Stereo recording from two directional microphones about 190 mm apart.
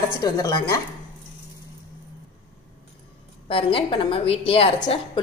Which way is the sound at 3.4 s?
30° left (ahead or behind).